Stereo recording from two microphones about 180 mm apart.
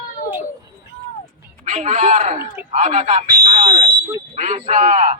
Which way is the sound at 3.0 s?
30° right (ahead or behind).